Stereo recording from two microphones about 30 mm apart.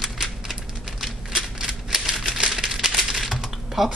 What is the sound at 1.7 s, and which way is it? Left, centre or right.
Typewriter, right.